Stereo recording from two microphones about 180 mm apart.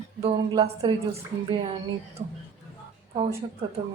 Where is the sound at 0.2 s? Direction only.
35° right (ahead or behind).